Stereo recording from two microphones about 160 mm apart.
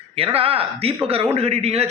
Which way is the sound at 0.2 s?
35° right (ahead or behind).